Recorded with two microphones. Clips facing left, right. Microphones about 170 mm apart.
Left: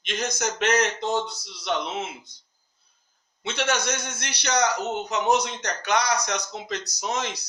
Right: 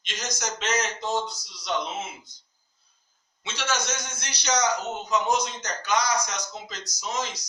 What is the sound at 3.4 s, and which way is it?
A man's voice, 60° left (ahead or behind).